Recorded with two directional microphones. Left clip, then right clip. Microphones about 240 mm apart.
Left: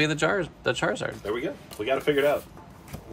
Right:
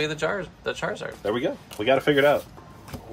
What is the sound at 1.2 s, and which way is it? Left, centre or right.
Speech, right.